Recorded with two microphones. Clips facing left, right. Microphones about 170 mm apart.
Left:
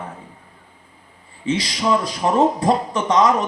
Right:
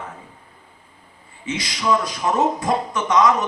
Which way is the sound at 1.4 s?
30° left (ahead or behind).